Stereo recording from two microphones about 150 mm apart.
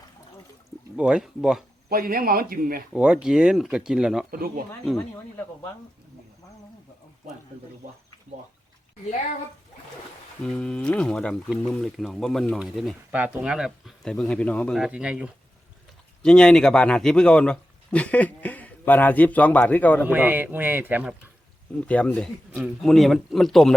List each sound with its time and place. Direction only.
0.9 s speech: 5° right (ahead or behind)
1.9 s speech: 75° right (ahead or behind)
2.9 s speech: 5° right (ahead or behind)
4.3 s speech: 75° right (ahead or behind)
10.4 s speech: 5° left (ahead or behind)
14.8 s speech: 5° right (ahead or behind)
16.2 s speech: 5° left (ahead or behind)
20.1 s speech: 10° right (ahead or behind)
21.8 s speech: 10° left (ahead or behind)